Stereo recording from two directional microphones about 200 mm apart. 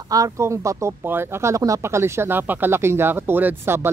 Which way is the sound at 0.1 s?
15° right (ahead or behind).